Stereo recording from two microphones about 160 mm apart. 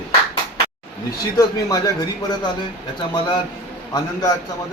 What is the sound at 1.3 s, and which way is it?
A man's voice, 25° left (ahead or behind).